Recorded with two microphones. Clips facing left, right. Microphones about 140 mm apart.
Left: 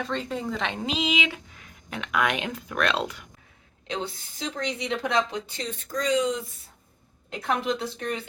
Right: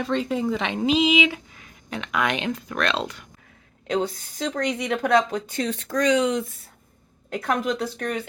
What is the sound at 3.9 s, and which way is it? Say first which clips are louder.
A woman's voice: right 7 dB; 50° right (ahead or behind).